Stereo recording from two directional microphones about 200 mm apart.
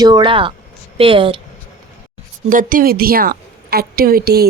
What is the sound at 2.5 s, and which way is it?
A woman's voice, 45° right (ahead or behind).